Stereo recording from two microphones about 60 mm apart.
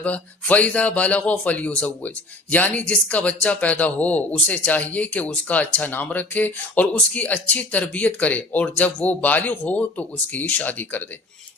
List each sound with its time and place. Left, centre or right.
0.0 s speech: left